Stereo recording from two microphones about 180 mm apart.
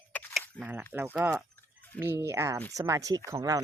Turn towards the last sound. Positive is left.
turn(degrees=-20)  # may be behind; listen again after turning